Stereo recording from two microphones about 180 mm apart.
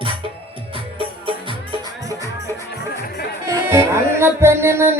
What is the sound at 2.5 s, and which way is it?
Music, 15° left (ahead or behind).